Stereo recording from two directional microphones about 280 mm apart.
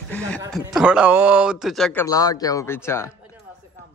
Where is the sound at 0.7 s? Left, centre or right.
Centre.